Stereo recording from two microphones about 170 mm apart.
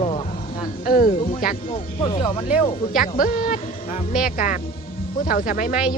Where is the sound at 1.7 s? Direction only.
30° left (ahead or behind).